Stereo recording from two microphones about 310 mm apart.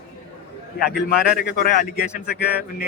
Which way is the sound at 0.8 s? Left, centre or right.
Left.